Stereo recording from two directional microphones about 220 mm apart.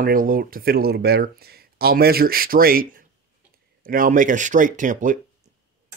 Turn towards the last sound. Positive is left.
turn(degrees=-35)  # may be behind; listen again after turning